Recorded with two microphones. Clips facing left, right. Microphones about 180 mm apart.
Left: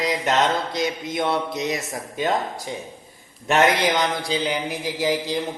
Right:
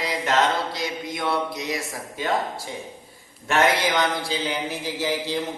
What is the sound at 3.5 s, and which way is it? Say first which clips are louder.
Mantra: left 2 dB; 15° left (ahead or behind).